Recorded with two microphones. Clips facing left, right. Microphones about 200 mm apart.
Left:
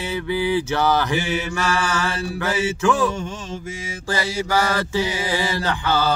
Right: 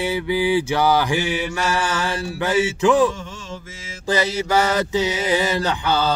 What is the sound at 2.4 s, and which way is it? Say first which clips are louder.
Mantra: right 3 dB; 15° right (ahead or behind).